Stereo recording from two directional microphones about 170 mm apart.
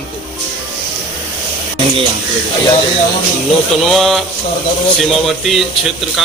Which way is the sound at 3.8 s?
Centre (ahead or behind).